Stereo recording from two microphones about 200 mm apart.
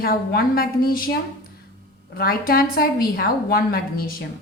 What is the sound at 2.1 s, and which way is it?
A woman's voice, 50° left (ahead or behind).